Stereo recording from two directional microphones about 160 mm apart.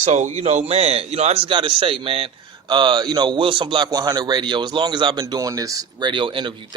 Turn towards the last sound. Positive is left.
turn(degrees=-30)  # may be behind; listen again after turning